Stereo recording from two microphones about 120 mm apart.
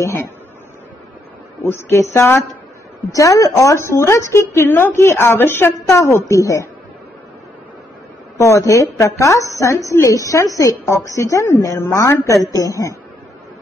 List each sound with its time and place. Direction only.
0.0 s a woman's voice: 25° left (ahead or behind)
1.7 s a woman's voice: 20° left (ahead or behind)
8.4 s a woman's voice: 25° left (ahead or behind)